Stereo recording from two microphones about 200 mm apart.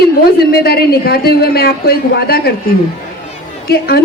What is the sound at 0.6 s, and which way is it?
Speech, 50° left (ahead or behind).